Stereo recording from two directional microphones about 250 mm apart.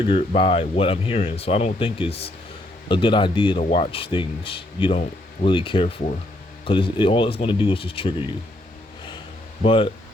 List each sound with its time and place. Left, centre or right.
0.1 s speech: left
9.6 s speech: left